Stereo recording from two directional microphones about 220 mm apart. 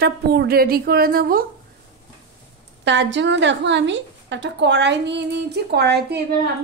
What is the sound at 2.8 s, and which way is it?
A woman's voice, 55° right (ahead or behind).